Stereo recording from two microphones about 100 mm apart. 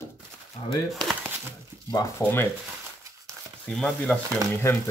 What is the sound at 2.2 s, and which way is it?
Speech, 20° left (ahead or behind).